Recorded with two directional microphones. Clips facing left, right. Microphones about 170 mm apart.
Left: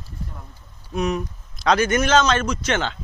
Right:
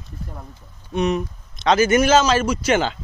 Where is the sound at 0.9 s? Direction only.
Centre (ahead or behind).